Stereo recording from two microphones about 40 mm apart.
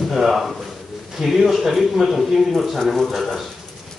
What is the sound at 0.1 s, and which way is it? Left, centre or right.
A man's voice, centre.